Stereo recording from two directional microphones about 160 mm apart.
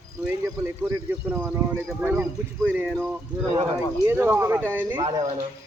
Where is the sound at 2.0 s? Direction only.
10° right (ahead or behind).